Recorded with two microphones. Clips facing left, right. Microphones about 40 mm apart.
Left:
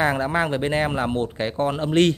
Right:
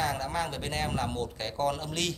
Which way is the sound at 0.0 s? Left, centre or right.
Left.